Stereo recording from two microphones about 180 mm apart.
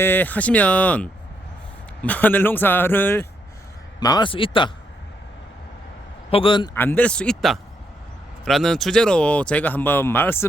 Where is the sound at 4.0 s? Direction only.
25° left (ahead or behind).